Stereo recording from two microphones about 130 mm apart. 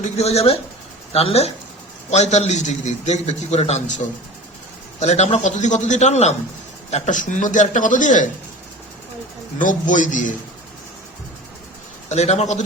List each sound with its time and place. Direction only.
0.2 s a man's voice: 50° left (ahead or behind); by 8.3 s 75° left (ahead or behind)
9.6 s a man's voice: 80° left
12.0 s a man's voice: 60° left (ahead or behind)